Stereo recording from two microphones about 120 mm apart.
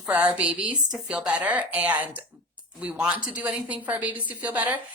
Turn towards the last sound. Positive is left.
turn(degrees=-15)  # may be behind; listen again after turning